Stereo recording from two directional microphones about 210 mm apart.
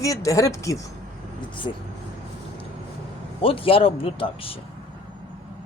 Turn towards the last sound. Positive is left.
turn(degrees=25)  # may be behind; listen again after turning